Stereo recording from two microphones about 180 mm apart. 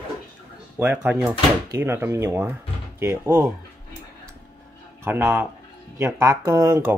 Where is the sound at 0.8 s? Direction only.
5° right (ahead or behind).